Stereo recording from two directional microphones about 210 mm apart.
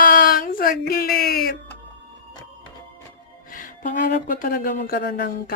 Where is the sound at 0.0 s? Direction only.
40° left (ahead or behind).